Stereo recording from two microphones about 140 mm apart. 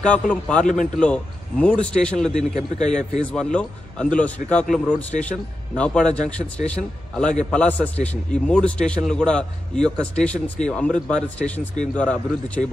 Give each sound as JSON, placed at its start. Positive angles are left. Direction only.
{"t": 0.0, "sound": "speech", "side_deg": 10}
{"t": 2.5, "sound": "a man's voice", "side_deg": 55}
{"t": 3.3, "sound": "speech", "side_deg": 5}